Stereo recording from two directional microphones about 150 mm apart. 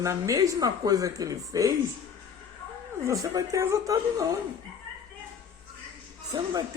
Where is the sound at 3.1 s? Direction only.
20° right (ahead or behind).